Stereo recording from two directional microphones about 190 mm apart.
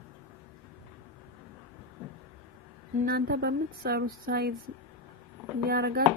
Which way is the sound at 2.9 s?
50° right (ahead or behind).